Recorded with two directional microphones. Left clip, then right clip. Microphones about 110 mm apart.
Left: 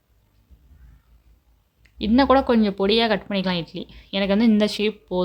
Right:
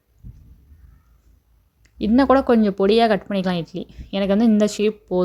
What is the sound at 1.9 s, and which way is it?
Speech, 45° right (ahead or behind).